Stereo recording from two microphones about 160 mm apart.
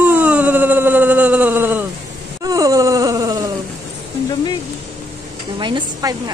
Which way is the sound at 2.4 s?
20° right (ahead or behind).